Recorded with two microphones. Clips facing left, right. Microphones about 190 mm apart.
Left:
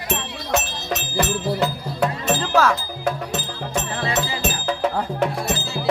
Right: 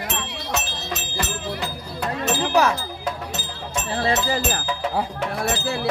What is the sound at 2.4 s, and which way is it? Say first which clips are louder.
Music: even; 15° right (ahead or behind).